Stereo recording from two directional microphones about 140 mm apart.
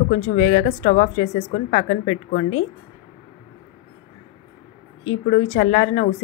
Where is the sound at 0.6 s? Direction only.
90° left.